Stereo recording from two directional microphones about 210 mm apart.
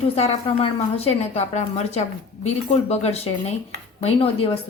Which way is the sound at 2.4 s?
30° left (ahead or behind).